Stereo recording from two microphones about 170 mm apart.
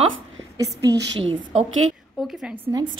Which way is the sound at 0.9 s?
90° right.